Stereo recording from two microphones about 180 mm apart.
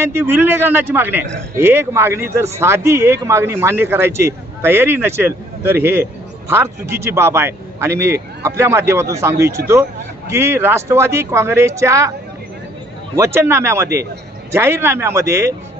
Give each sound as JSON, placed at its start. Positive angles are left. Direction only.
{"t": 0.1, "sound": "a man's voice", "side_deg": -10}
{"t": 13.1, "sound": "a man's voice", "side_deg": -15}